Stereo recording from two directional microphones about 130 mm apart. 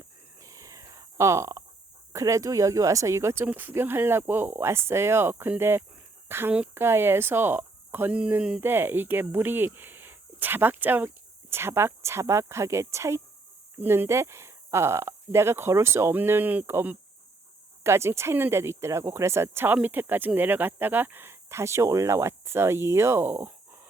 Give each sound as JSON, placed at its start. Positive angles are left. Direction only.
{"t": 0.3, "sound": "whispering", "side_deg": -25}
{"t": 2.1, "sound": "speech", "side_deg": -25}